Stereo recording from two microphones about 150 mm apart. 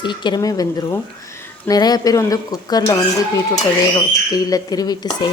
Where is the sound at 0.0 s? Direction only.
30° left (ahead or behind).